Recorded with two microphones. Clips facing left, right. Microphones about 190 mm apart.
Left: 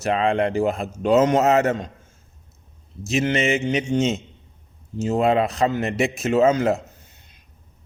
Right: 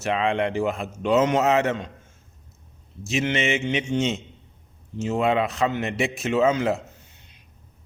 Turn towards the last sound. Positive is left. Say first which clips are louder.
# left 3 dB
turn(degrees=45)  # may be behind; listen again after turning